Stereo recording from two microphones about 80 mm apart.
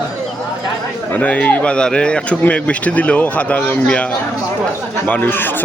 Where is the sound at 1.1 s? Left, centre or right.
Centre.